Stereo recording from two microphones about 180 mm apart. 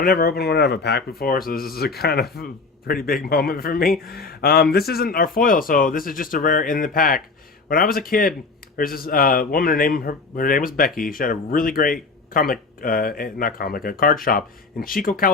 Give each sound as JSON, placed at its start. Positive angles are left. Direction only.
{"t": 0.0, "sound": "a man's voice", "side_deg": 55}